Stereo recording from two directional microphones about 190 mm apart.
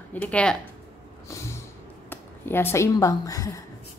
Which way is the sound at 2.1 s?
10° left (ahead or behind).